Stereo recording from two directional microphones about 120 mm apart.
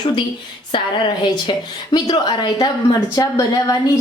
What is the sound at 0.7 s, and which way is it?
A woman's voice, 45° left (ahead or behind).